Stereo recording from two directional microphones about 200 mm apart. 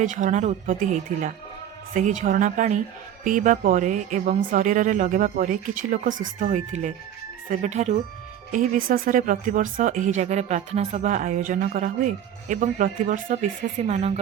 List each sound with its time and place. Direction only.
0.0 s speech: 40° right (ahead or behind)